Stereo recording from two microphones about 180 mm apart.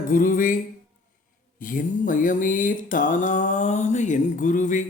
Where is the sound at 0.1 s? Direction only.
50° left (ahead or behind).